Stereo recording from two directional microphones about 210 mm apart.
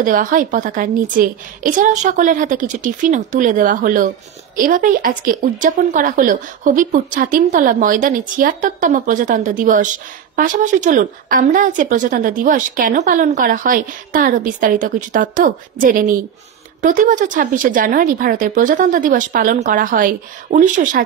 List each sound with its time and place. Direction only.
0.0 s a woman's voice: 40° right (ahead or behind)